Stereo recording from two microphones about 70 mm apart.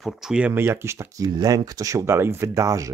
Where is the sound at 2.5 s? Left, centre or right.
Right.